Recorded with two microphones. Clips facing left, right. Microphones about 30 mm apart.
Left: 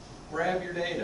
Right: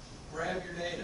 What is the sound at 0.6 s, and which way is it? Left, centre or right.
Speech, left.